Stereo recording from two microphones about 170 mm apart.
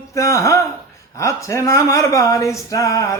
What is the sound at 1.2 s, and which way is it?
Speech, 15° left (ahead or behind).